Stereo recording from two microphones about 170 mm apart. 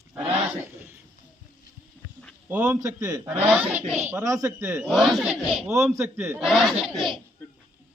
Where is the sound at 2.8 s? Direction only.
20° right (ahead or behind).